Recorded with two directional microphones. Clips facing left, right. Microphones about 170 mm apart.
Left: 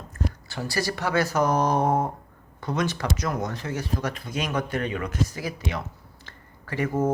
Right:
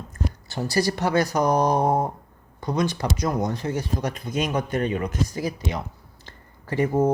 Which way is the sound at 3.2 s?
15° right (ahead or behind).